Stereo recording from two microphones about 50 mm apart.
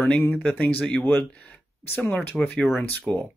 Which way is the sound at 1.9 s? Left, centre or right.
Left.